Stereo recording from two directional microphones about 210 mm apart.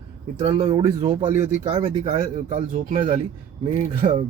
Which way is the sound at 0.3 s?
25° right (ahead or behind).